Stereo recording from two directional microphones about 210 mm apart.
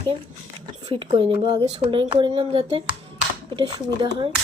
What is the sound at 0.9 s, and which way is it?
Speech, 25° right (ahead or behind).